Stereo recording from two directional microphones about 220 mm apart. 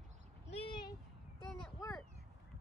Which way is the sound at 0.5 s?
25° left (ahead or behind).